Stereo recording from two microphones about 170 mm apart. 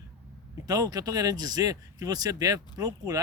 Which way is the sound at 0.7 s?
20° right (ahead or behind).